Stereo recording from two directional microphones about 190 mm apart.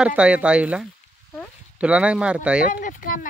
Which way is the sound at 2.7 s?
45° left (ahead or behind).